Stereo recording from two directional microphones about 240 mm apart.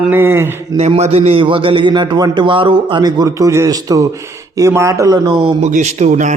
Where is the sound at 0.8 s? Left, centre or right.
Right.